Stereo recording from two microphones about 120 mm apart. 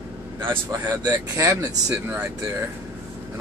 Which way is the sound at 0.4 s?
40° right (ahead or behind).